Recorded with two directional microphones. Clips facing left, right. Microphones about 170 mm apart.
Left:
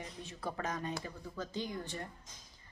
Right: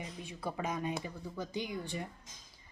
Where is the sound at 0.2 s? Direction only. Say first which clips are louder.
Right 1 dB; 10° right (ahead or behind).